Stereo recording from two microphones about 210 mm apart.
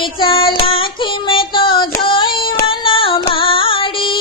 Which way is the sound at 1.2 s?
25° left (ahead or behind).